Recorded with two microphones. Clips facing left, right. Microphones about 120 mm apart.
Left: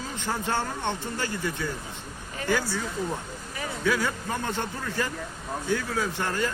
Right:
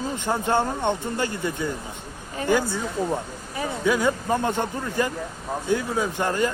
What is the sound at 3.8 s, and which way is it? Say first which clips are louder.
Speech: right 5 dB; 15° right (ahead or behind).